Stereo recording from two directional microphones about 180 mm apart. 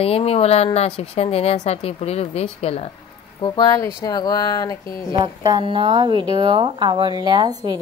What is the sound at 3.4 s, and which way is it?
Speech, 25° left (ahead or behind).